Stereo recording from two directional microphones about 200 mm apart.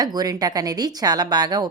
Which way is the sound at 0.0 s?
20° right (ahead or behind).